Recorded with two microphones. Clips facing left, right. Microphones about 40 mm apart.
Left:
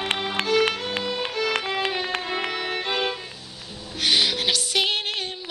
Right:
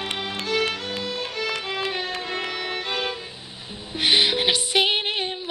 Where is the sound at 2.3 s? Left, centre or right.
Centre.